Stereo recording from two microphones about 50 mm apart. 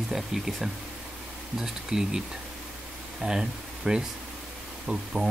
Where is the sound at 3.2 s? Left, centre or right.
Centre.